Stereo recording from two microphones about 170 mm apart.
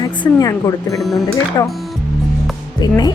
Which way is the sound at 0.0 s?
20° left (ahead or behind).